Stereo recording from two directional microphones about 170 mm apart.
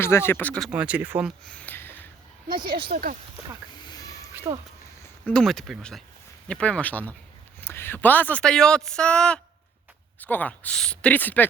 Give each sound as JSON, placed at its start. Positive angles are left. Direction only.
{"t": 0.0, "sound": "speech", "side_deg": 15}
{"t": 0.7, "sound": "speech", "side_deg": -5}
{"t": 1.5, "sound": "a sound", "side_deg": 10}
{"t": 2.5, "sound": "speech", "side_deg": -30}
{"t": 2.9, "sound": "speech", "side_deg": -60}
{"t": 3.8, "sound": "a sound", "side_deg": 20}
{"t": 5.0, "sound": "speech", "side_deg": 5}